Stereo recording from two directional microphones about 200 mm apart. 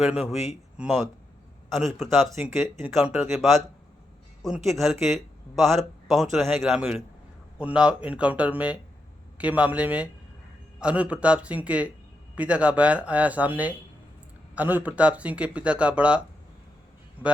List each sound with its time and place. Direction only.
0.0 s speech: centre (ahead or behind)
2.3 s speech: 15° right (ahead or behind)